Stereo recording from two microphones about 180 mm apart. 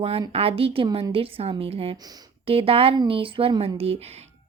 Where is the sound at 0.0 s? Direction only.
30° right (ahead or behind).